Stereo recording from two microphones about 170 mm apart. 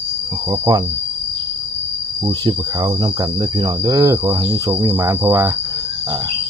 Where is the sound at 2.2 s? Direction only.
25° right (ahead or behind).